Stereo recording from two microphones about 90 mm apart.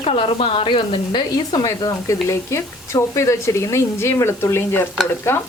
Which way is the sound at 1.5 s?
40° left (ahead or behind).